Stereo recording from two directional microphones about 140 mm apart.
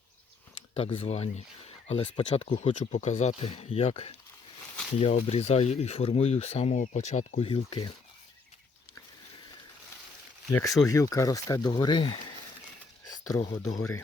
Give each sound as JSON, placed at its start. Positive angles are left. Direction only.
{"t": 0.7, "sound": "speech", "side_deg": 45}
{"t": 2.5, "sound": "speech", "side_deg": 55}
{"t": 7.4, "sound": "speech", "side_deg": 40}
{"t": 10.8, "sound": "speech", "side_deg": 25}
{"t": 13.1, "sound": "a sound", "side_deg": 30}
{"t": 13.7, "sound": "speech", "side_deg": 25}